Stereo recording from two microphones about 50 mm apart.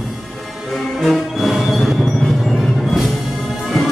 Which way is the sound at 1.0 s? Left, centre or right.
Centre.